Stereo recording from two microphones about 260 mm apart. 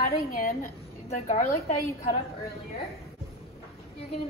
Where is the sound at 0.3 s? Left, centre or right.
Left.